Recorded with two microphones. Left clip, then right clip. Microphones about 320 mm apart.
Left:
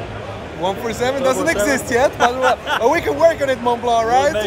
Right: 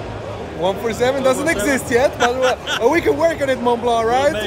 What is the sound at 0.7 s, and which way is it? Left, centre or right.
Speech, centre.